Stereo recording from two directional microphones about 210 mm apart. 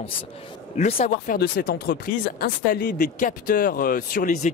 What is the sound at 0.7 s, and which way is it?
Speech, 30° left (ahead or behind).